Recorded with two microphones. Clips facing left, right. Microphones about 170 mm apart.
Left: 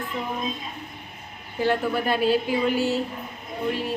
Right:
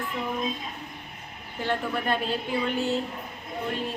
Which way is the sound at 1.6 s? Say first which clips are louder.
Left 5 dB; 5° left (ahead or behind).